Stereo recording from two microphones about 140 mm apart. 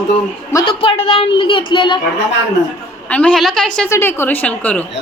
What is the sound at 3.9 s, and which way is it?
Speech, 15° left (ahead or behind).